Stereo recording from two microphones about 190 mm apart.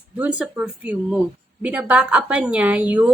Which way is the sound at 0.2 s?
5° right (ahead or behind).